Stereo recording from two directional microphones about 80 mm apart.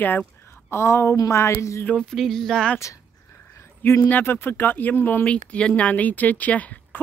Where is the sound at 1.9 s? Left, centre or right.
Centre.